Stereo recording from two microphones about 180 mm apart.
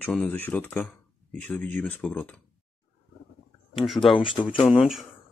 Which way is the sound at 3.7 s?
Centre (ahead or behind).